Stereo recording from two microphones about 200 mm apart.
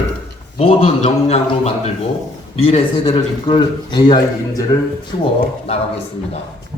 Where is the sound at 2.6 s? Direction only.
30° left (ahead or behind).